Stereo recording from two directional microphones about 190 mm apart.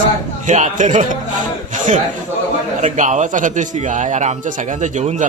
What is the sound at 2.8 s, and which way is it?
A man's voice, 40° right (ahead or behind).